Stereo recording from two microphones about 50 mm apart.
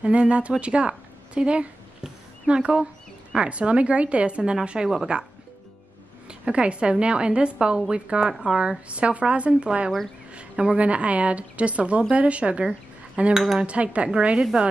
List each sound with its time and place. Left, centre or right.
0.0 s a woman's voice: right
6.2 s a woman's voice: right